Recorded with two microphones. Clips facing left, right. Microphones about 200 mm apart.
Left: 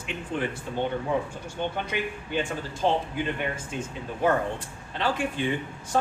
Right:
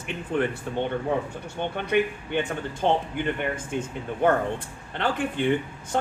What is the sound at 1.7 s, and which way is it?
Speech, 60° right (ahead or behind).